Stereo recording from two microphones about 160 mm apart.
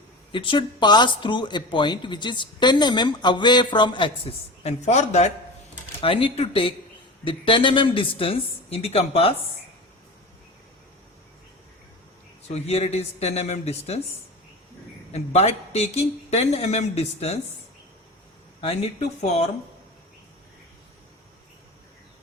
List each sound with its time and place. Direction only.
0.3 s speech: 30° left (ahead or behind)
6.0 s speech: 35° left (ahead or behind)
12.5 s speech: 40° left (ahead or behind)
15.1 s speech: 45° left (ahead or behind)
18.6 s speech: 40° left (ahead or behind)